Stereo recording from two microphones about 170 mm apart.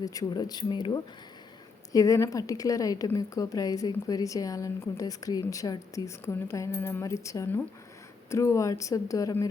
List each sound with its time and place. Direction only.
0.0 s a woman's voice: 20° left (ahead or behind)